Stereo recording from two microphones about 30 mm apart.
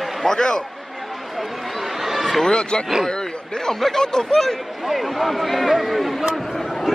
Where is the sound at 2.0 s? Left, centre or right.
Centre.